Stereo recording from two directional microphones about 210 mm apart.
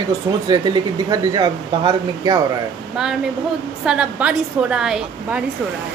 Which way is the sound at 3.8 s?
5° right (ahead or behind).